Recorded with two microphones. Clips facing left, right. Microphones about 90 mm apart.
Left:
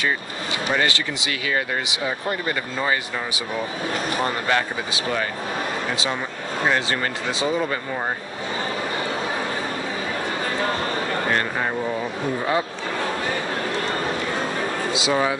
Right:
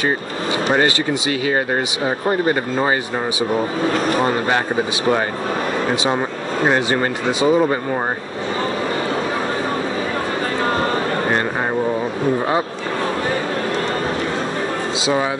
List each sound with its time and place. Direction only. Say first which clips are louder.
0.7 s speech: right 5 dB; 35° right (ahead or behind)
4.2 s speech: right 4 dB; 25° right (ahead or behind)
6.6 s speech: right 5 dB; 30° right (ahead or behind)